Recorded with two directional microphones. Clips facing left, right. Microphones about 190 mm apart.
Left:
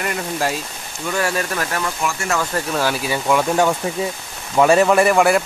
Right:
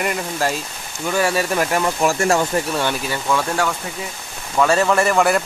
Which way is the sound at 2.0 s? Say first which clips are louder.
Right 5 dB; 30° right (ahead or behind).